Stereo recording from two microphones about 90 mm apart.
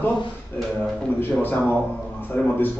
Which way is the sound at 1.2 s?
20° left (ahead or behind).